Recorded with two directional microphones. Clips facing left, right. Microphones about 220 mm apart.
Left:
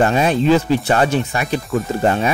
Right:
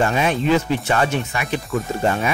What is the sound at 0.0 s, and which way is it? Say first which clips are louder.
Speech: left 4 dB; 35° left (ahead or behind).